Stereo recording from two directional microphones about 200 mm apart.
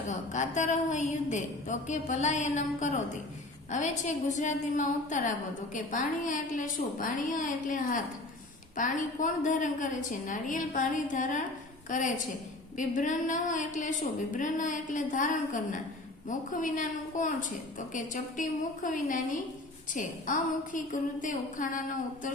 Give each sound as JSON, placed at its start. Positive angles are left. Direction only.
{"t": 0.1, "sound": "a woman's voice", "side_deg": 35}